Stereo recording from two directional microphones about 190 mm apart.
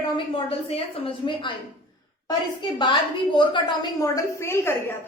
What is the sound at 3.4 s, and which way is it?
A woman's voice, 25° left (ahead or behind).